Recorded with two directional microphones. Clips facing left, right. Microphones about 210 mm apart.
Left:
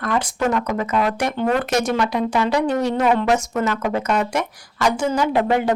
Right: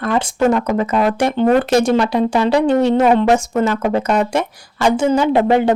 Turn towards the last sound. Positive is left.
turn(degrees=-25)  # may be behind; listen again after turning